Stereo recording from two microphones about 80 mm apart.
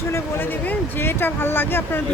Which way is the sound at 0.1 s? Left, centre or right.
Left.